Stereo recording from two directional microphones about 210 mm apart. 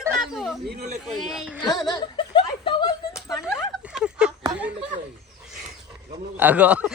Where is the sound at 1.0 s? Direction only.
Centre (ahead or behind).